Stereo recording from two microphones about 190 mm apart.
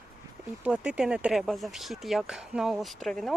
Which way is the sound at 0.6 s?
5° right (ahead or behind).